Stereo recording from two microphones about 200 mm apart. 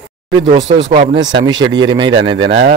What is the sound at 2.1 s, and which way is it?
Speech, 70° right (ahead or behind).